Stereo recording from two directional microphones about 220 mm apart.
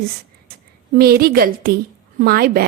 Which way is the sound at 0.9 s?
45° right (ahead or behind).